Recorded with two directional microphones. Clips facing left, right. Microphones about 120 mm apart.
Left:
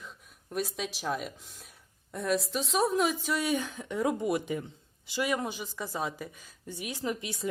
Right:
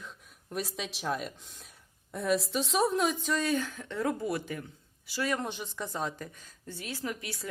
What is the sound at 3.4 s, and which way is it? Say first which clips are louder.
Speech: even; 15° left (ahead or behind).